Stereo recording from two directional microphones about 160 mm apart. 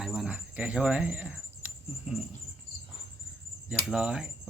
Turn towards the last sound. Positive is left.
turn(degrees=-5)  # may be behind; listen again after turning